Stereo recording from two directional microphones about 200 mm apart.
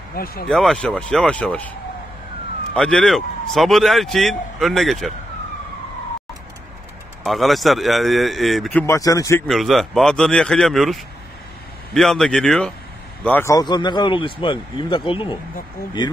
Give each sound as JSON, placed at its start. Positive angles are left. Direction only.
{"t": 0.1, "sound": "speech", "side_deg": 50}
{"t": 0.5, "sound": "speech", "side_deg": 5}
{"t": 7.2, "sound": "speech", "side_deg": 0}
{"t": 8.8, "sound": "speech", "side_deg": 15}
{"t": 9.5, "sound": "a man's voice", "side_deg": 0}